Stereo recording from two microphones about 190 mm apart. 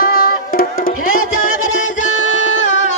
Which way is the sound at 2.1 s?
85° left.